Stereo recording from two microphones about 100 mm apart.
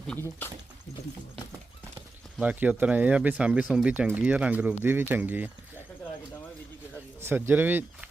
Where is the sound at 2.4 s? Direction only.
15° right (ahead or behind).